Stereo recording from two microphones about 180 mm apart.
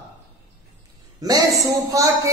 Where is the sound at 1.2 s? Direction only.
20° right (ahead or behind).